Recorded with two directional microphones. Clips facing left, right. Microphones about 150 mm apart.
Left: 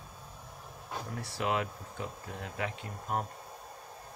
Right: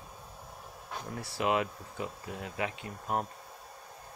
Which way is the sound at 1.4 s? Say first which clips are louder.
Right 3 dB; 10° right (ahead or behind).